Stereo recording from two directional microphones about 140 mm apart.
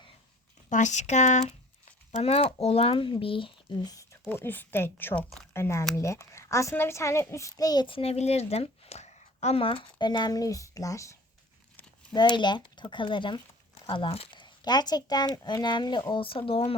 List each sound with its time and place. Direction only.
0.7 s a child's voice: 60° left (ahead or behind); by 16.7 s 40° left (ahead or behind)